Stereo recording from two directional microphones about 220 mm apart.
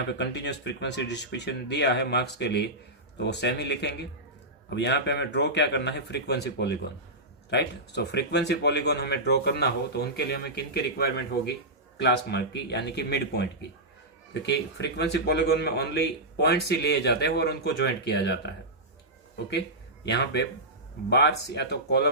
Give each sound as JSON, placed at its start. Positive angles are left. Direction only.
{"t": 0.2, "sound": "speech", "side_deg": 50}
{"t": 20.1, "sound": "speech", "side_deg": 50}